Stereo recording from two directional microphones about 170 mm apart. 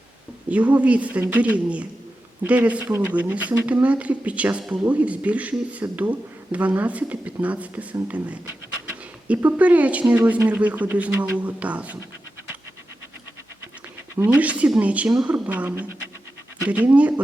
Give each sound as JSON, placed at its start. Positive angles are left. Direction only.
{"t": 0.5, "sound": "speech", "side_deg": -10}
{"t": 14.2, "sound": "speech", "side_deg": -10}